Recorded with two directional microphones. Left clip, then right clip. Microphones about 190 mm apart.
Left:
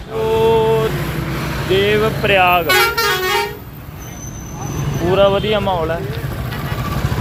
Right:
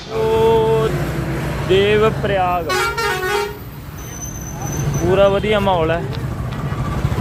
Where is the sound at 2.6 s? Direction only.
55° left (ahead or behind).